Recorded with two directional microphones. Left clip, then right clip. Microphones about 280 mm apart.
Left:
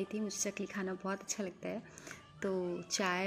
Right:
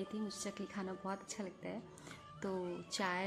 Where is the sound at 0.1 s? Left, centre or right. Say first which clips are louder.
Left 5 dB; centre.